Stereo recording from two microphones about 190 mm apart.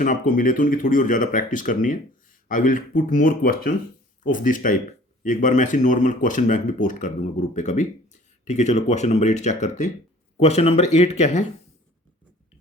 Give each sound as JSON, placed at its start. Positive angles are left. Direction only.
{"t": 0.0, "sound": "speech", "side_deg": 45}